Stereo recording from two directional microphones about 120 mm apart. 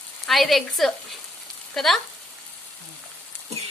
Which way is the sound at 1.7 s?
5° left (ahead or behind).